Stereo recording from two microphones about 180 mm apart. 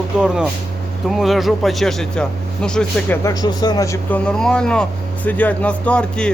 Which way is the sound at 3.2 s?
20° left (ahead or behind).